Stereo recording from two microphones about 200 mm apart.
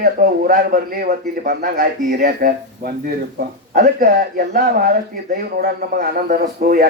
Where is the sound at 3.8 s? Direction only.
45° right (ahead or behind).